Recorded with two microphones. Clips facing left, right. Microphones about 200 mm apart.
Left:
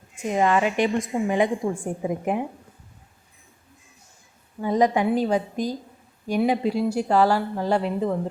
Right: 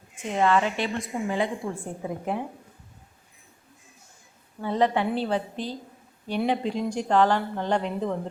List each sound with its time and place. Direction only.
0.2 s speech: 10° left (ahead or behind)
4.6 s speech: 10° left (ahead or behind)